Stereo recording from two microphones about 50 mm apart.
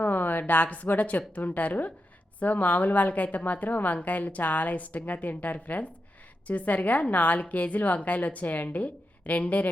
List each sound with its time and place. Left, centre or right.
0.0 s a woman's voice: left